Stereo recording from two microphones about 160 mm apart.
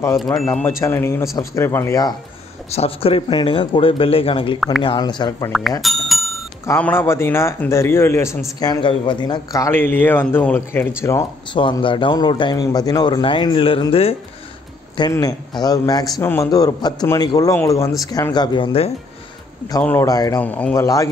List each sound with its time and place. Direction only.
0.2 s speech: centre (ahead or behind)
0.5 s speech: 15° left (ahead or behind)
2.7 s a man's voice: 40° left (ahead or behind)
5.8 s bicycle bell: centre (ahead or behind)
6.6 s speech: 15° left (ahead or behind)
8.5 s a man's voice: 30° left (ahead or behind)
11.5 s a man's voice: 30° left (ahead or behind)
15.0 s a man's voice: 20° left (ahead or behind)
19.8 s speech: 10° left (ahead or behind)
20.1 s a man's voice: 20° left (ahead or behind)
20.4 s speech: 10° left (ahead or behind)
20.8 s a man's voice: 20° left (ahead or behind)